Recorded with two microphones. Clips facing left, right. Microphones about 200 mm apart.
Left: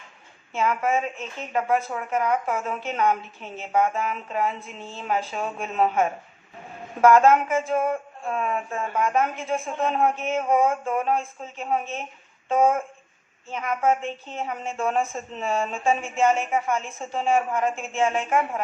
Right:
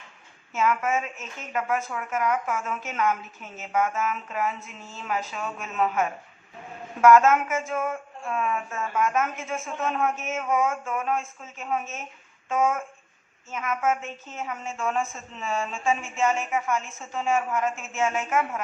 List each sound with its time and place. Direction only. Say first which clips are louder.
0.5 s a woman's voice: left 1 dB; 35° left (ahead or behind)